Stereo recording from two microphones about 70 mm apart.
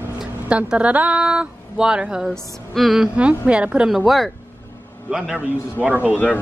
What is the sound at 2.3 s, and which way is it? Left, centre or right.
Speech, centre.